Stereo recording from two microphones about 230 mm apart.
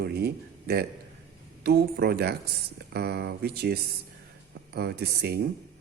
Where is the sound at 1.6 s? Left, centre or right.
Right.